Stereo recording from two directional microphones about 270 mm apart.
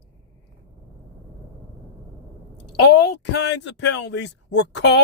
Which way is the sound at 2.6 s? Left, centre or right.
Left.